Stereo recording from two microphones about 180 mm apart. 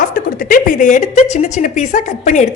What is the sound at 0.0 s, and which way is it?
A woman's voice, 50° left (ahead or behind).